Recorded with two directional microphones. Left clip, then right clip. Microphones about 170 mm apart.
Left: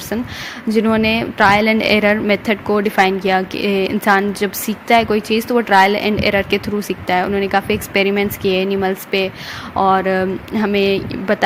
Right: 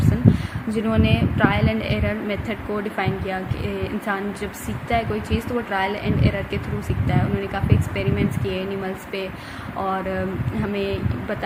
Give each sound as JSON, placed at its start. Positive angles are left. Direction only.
{"t": 0.7, "sound": "a woman's voice", "side_deg": 45}